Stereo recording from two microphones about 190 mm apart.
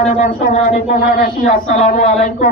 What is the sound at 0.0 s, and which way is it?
Speech, 40° left (ahead or behind).